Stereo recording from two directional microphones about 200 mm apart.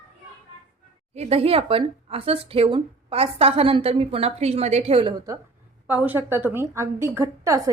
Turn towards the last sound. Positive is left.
turn(degrees=-15)  # may be behind; listen again after turning